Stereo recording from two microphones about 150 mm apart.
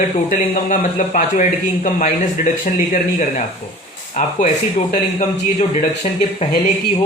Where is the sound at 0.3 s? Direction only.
55° left (ahead or behind).